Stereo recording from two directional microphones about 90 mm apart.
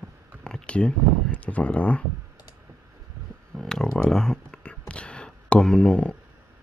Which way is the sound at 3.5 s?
5° left (ahead or behind).